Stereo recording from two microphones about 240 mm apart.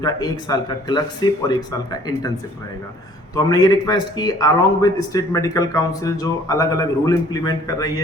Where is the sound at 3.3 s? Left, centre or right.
Centre.